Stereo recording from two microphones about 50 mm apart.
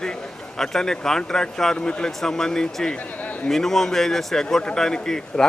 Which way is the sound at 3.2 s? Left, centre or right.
Left.